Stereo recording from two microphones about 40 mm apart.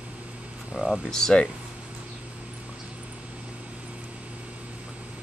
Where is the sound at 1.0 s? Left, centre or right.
Centre.